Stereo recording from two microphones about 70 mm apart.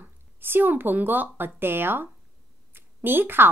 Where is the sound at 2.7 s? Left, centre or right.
Right.